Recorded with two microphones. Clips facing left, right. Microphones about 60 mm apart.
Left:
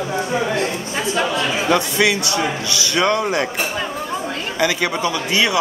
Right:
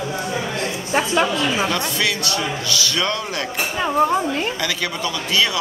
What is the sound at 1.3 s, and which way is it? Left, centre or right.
A man's voice, left.